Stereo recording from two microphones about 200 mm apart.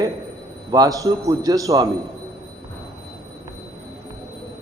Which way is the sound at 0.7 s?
20° right (ahead or behind).